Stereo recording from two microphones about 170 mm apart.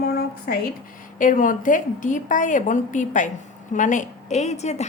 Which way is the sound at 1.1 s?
50° left (ahead or behind).